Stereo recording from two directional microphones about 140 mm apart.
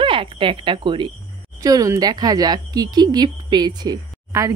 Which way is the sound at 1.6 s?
25° right (ahead or behind).